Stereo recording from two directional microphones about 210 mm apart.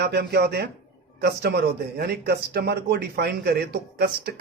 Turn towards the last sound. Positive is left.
turn(degrees=-50)  # may be behind; listen again after turning